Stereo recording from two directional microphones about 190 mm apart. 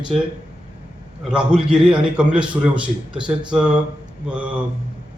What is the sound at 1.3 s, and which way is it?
Speech, 5° right (ahead or behind).